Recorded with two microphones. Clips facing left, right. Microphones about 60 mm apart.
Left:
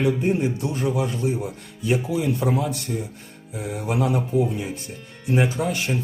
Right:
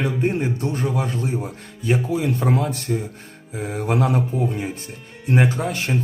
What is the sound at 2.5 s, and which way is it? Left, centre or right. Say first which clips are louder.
A man's voice: right 2 dB; right.